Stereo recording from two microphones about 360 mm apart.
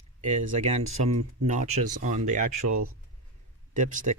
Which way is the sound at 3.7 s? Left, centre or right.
Right.